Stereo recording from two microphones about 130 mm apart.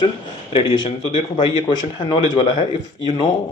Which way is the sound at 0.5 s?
40° left (ahead or behind).